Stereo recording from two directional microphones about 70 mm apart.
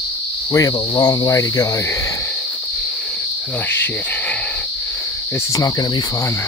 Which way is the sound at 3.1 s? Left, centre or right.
Left.